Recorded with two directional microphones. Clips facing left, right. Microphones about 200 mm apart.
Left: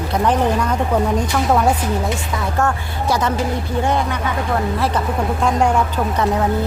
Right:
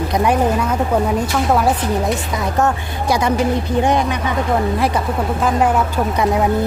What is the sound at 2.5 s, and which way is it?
Speech, 15° right (ahead or behind).